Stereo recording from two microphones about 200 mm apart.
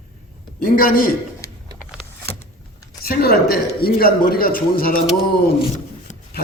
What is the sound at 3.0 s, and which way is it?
A woman's voice, 50° left (ahead or behind).